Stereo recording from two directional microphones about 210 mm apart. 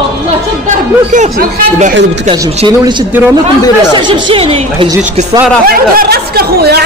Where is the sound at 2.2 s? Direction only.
25° right (ahead or behind).